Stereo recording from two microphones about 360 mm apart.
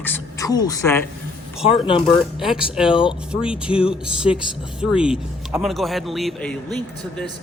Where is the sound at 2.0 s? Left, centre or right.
Centre.